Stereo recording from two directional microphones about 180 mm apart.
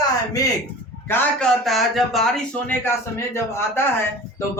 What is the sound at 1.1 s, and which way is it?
Speech, 5° left (ahead or behind).